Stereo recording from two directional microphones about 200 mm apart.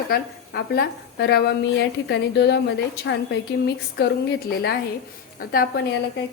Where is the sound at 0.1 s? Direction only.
50° left (ahead or behind).